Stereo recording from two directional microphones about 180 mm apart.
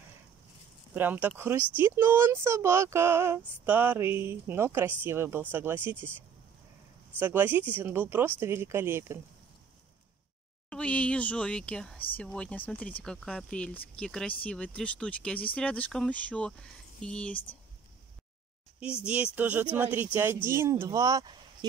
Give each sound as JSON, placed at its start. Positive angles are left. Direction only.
{"t": 0.9, "sound": "speech", "side_deg": -10}
{"t": 7.2, "sound": "speech", "side_deg": -10}
{"t": 10.7, "sound": "speech", "side_deg": 5}
{"t": 19.0, "sound": "speech", "side_deg": -10}